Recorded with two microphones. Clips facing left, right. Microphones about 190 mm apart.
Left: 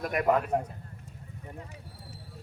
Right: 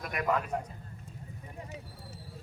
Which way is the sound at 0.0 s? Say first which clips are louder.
Left 5 dB; 45° left (ahead or behind).